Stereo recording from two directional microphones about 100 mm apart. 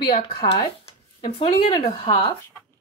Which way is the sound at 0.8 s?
70° left (ahead or behind).